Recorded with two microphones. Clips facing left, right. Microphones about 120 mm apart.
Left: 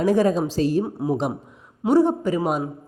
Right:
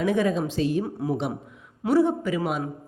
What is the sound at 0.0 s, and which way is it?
A man's voice, 35° left (ahead or behind).